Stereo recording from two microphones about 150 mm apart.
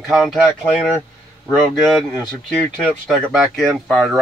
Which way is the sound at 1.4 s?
Centre (ahead or behind).